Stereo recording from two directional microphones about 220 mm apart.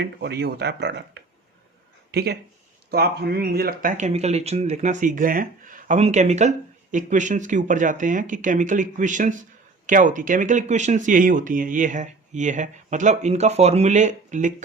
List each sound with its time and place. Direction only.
0.0 s speech: 50° right (ahead or behind)